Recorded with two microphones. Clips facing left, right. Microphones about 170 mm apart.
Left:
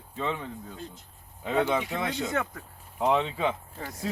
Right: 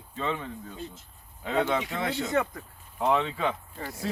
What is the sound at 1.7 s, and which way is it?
Speech, centre (ahead or behind).